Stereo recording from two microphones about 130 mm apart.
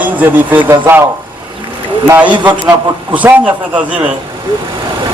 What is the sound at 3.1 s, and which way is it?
Speech, 10° right (ahead or behind).